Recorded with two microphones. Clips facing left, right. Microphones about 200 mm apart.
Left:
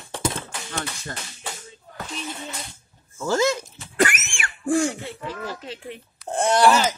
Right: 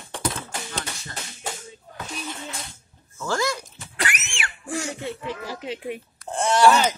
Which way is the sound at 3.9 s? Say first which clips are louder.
Left 8 dB; 50° left (ahead or behind).